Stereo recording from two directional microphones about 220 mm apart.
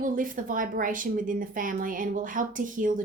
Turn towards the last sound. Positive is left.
turn(degrees=-35)  # may be behind; listen again after turning